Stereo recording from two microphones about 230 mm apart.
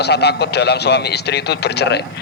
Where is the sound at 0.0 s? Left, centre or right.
Left.